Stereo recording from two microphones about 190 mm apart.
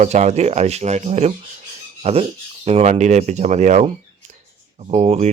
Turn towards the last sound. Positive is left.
turn(degrees=-35)  # may be behind; listen again after turning